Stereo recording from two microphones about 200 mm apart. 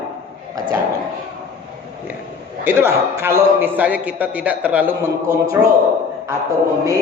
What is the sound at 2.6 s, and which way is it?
A man's voice, 10° right (ahead or behind).